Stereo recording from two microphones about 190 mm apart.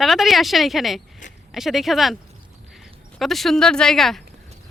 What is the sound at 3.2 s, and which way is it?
Speech, centre (ahead or behind).